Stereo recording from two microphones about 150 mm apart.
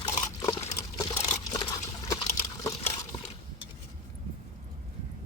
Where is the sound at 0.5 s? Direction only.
25° left (ahead or behind).